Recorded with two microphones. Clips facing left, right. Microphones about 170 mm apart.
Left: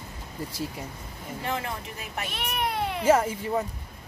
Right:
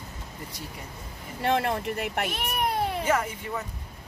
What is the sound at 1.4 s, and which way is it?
Speech, 65° right (ahead or behind).